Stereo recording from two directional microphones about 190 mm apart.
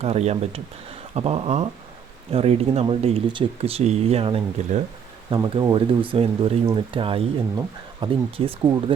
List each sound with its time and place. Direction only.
0.0 s speech: 35° right (ahead or behind)